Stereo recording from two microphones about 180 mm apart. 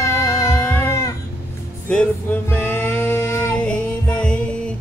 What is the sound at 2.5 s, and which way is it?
Music, 10° left (ahead or behind).